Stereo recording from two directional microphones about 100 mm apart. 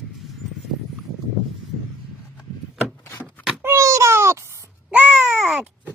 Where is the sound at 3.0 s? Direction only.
25° left (ahead or behind).